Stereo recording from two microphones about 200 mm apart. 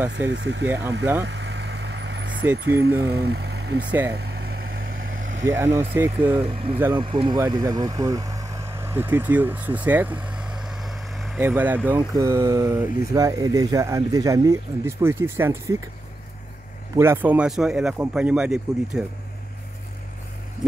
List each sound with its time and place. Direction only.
0.1 s speech: 60° right (ahead or behind)
1.2 s vehicle: 60° right (ahead or behind)
2.6 s speech: 60° right (ahead or behind)
4.2 s vehicle: 55° right (ahead or behind)
5.5 s speech: 10° right (ahead or behind)
6.3 s speech: 30° right (ahead or behind); by 15.8 s 15° right (ahead or behind)
16.9 s speech: 10° right (ahead or behind)